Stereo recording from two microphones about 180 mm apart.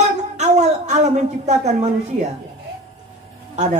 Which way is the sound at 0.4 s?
40° right (ahead or behind).